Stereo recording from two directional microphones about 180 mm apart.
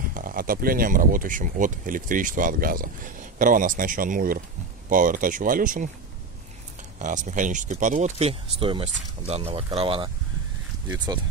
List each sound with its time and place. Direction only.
0.1 s speech: 50° right (ahead or behind)
7.0 s speech: 45° right (ahead or behind)